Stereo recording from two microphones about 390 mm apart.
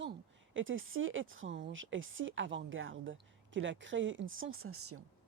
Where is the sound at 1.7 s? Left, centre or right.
Right.